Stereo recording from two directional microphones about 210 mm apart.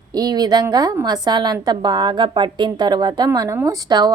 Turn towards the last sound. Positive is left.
turn(degrees=-20)  # may be behind; listen again after turning